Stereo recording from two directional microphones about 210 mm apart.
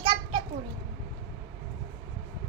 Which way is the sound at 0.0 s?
20° right (ahead or behind).